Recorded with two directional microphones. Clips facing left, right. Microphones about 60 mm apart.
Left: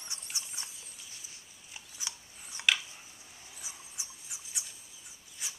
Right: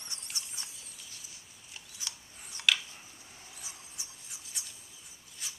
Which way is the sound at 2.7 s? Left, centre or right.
Centre.